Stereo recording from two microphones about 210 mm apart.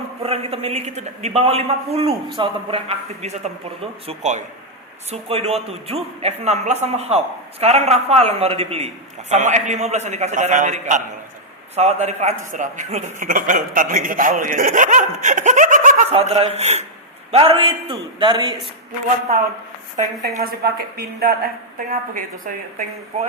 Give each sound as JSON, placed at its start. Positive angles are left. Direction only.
{"t": 0.2, "sound": "a man's voice", "side_deg": -30}
{"t": 20.3, "sound": "a woman's voice", "side_deg": -45}